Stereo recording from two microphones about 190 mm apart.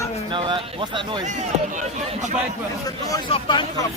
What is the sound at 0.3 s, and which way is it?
Speech, 25° right (ahead or behind).